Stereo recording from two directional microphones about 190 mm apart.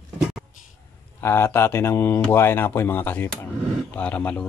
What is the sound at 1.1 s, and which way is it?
A man's voice, 10° left (ahead or behind).